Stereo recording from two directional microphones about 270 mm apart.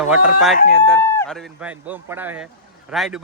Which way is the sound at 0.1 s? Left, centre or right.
Centre.